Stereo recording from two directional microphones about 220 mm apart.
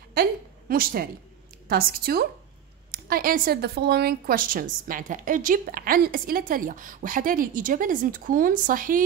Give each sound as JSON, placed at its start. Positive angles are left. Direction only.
{"t": 0.1, "sound": "a woman's voice", "side_deg": -40}